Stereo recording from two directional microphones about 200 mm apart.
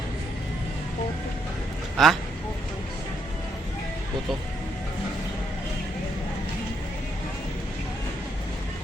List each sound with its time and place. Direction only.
2.0 s speech: centre (ahead or behind)